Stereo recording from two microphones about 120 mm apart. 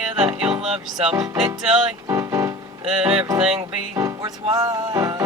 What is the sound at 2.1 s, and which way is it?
Keyboard, 25° right (ahead or behind).